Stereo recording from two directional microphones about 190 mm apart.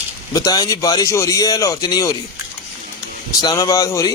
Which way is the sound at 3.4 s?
20° left (ahead or behind).